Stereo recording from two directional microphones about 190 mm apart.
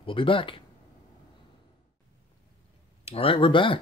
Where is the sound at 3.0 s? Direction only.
30° left (ahead or behind).